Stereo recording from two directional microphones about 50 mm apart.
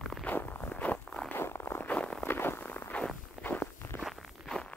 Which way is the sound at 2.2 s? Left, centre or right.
Left.